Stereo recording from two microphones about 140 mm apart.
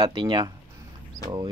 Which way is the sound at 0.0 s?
35° right (ahead or behind).